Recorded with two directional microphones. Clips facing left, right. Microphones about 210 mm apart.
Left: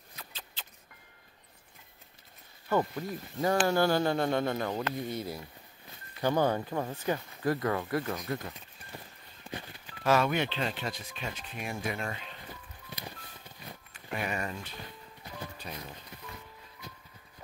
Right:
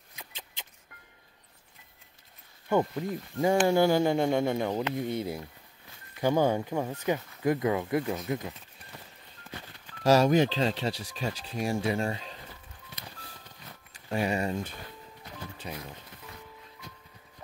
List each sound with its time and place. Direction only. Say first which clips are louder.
0.1 s a sound: right 1 dB; 15° right (ahead or behind)
3.0 s speech: right 4 dB; 15° right (ahead or behind)
6.2 s speech: right 3 dB; 15° right (ahead or behind)
9.5 s a sound: left 3 dB; 10° left (ahead or behind)
10.0 s speech: right 5 dB; 35° right (ahead or behind)
14.0 s speech: right 6 dB; 30° right (ahead or behind)
15.7 s speech: right 6 dB; 15° right (ahead or behind)
16.8 s music: left 2 dB; centre (ahead or behind)